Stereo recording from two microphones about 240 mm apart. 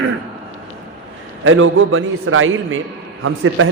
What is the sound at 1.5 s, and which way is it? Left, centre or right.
A man's voice, right.